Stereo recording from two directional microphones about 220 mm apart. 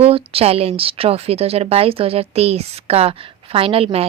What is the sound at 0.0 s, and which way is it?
Speech, 25° right (ahead or behind).